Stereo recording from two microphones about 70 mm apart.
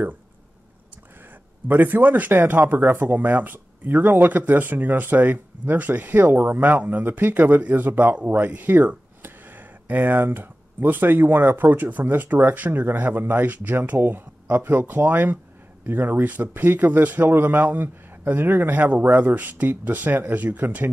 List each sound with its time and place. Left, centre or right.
1.7 s speech: right